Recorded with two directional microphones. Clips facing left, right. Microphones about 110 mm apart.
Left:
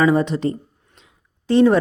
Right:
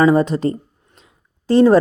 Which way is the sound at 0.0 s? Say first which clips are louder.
Right 3 dB; 40° right (ahead or behind).